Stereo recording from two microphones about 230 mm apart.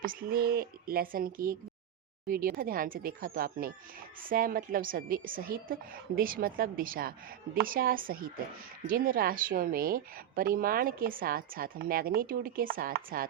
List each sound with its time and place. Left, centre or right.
0.0 s a woman's voice: right